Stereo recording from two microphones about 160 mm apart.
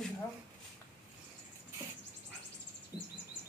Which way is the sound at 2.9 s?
25° left (ahead or behind).